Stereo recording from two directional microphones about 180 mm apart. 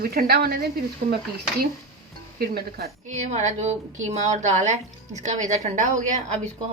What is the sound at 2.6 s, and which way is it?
Speech, 60° right (ahead or behind).